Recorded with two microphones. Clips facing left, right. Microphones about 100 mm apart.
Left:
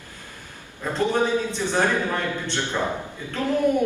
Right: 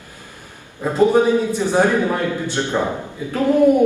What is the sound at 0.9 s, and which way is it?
A man's voice, 15° right (ahead or behind).